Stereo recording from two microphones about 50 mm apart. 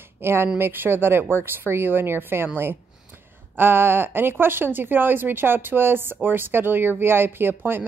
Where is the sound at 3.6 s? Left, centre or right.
Right.